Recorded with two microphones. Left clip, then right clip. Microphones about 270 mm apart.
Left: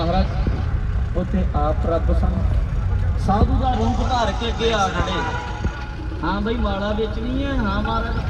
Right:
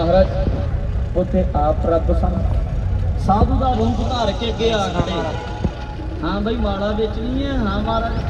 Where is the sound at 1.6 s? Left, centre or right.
Left.